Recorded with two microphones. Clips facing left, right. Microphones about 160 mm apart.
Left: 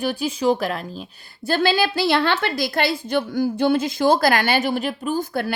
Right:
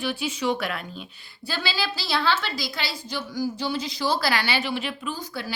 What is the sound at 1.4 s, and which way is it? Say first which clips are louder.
A woman's voice: left 10 dB; 50° left (ahead or behind).